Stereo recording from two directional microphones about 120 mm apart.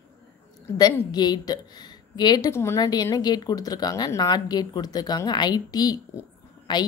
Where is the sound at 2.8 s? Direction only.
35° left (ahead or behind).